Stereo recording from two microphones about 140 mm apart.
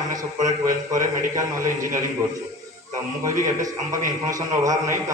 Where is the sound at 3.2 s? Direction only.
25° right (ahead or behind).